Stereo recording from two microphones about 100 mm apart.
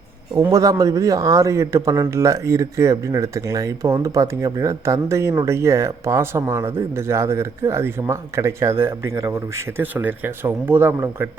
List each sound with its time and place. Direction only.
0.5 s speech: 35° right (ahead or behind)